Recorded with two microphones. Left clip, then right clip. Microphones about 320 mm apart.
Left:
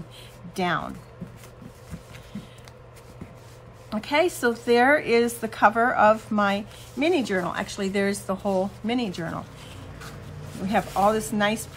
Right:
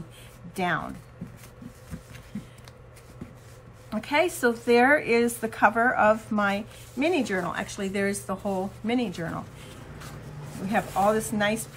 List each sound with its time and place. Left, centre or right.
0.6 s a woman's voice: centre
2.3 s a sound: centre
3.9 s a woman's voice: centre
10.5 s a woman's voice: centre